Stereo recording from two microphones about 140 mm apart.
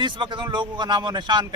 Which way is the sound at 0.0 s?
35° right (ahead or behind).